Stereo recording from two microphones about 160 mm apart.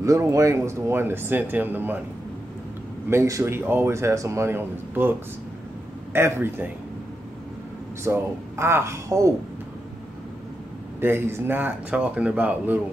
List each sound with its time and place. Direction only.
0.0 s speech: 20° right (ahead or behind)
3.1 s speech: 20° right (ahead or behind)
6.1 s speech: 15° right (ahead or behind)
8.0 s speech: 15° right (ahead or behind)
11.0 s speech: 15° right (ahead or behind)